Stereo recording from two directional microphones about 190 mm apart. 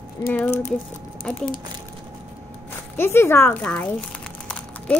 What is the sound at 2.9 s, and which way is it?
Crumpling, 10° left (ahead or behind).